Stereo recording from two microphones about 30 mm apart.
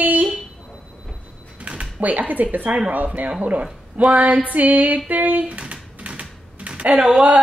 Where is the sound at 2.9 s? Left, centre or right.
Right.